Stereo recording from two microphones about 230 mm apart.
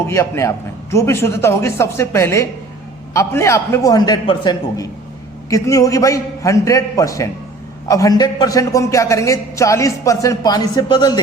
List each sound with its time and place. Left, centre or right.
0.1 s a man's voice: centre